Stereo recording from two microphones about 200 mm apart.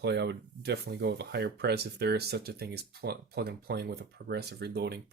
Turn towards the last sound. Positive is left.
turn(degrees=-55)  # may be behind; listen again after turning